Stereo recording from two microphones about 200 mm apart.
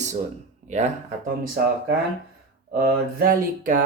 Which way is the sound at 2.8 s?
50° right (ahead or behind).